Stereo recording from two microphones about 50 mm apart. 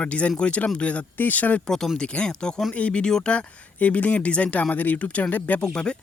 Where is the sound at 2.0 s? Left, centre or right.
Left.